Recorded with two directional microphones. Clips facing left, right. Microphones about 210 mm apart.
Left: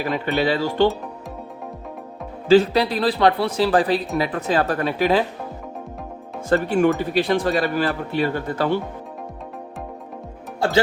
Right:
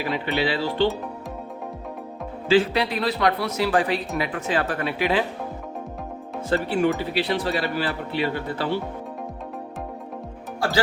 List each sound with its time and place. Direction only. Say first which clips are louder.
0.0 s speech: left 3 dB; 45° left (ahead or behind)
2.5 s speech: left 5 dB; 40° left (ahead or behind)
6.5 s speech: left 4 dB; 50° left (ahead or behind)